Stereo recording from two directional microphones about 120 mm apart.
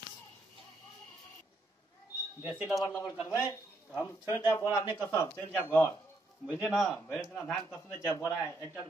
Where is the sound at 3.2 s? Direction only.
25° left (ahead or behind).